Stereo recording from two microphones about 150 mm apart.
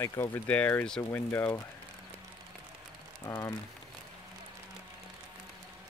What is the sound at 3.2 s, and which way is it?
Speech, 20° left (ahead or behind).